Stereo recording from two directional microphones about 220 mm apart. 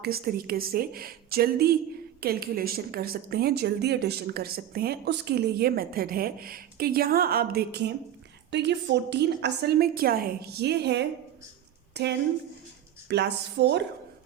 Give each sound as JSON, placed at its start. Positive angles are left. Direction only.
{"t": 0.0, "sound": "a woman's voice", "side_deg": -45}